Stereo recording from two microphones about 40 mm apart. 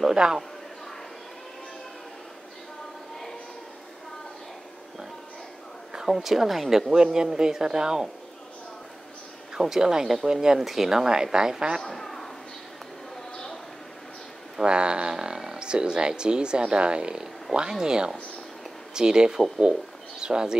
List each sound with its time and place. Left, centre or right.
0.1 s speech: centre
6.1 s a woman's voice: centre
6.9 s speech: centre
9.5 s speech: centre
10.6 s speech: centre
11.9 s a sound: centre
14.6 s speech: right